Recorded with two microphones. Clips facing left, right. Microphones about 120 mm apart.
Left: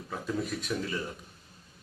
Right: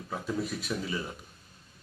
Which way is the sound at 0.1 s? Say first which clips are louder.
Even; 5° right (ahead or behind).